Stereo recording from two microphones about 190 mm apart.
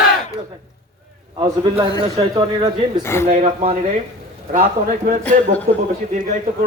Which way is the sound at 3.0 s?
15° left (ahead or behind).